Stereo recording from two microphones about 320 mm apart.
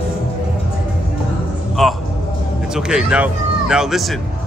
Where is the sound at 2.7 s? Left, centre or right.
Centre.